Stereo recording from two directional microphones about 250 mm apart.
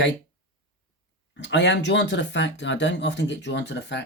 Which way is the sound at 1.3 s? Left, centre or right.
Left.